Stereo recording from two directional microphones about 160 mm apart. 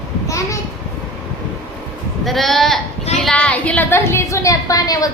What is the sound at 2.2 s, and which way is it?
A woman's voice, centre (ahead or behind).